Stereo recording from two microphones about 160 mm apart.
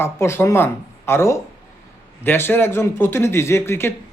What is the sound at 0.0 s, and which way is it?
Speech, 15° left (ahead or behind).